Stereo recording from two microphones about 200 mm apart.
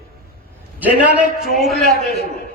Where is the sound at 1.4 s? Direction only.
Centre (ahead or behind).